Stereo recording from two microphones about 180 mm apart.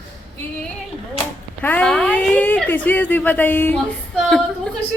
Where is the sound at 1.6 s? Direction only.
5° left (ahead or behind).